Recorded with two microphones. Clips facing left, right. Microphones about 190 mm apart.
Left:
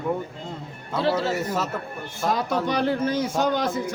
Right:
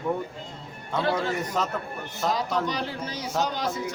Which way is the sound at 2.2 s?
55° left (ahead or behind).